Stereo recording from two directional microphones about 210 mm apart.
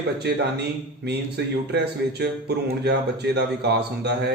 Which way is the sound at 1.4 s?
55° right (ahead or behind).